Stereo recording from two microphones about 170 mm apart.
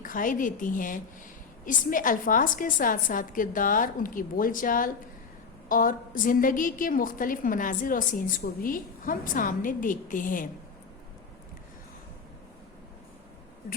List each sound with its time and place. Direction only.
0.0 s a woman's voice: 50° left (ahead or behind)